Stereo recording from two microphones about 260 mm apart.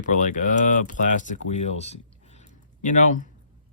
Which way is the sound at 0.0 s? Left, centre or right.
Left.